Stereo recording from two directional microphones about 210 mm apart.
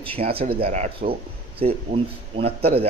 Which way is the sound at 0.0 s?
25° right (ahead or behind).